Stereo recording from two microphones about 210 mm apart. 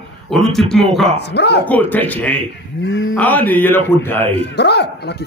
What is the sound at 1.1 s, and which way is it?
Speech, 55° left (ahead or behind).